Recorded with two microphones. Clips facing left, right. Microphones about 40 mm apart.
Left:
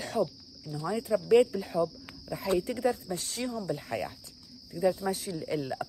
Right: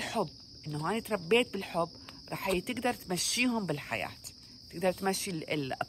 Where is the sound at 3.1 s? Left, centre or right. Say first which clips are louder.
Right 5 dB; right.